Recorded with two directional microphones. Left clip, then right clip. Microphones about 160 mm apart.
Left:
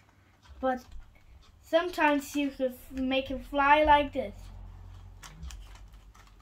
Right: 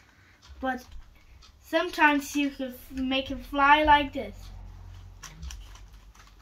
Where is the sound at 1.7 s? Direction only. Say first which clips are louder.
Right 3 dB; 30° left (ahead or behind).